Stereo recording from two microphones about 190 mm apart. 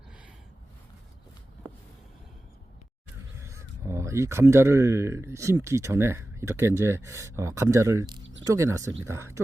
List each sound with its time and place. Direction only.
3.3 s speech: 15° right (ahead or behind)